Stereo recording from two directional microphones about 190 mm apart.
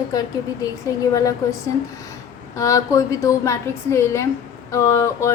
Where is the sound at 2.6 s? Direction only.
15° left (ahead or behind).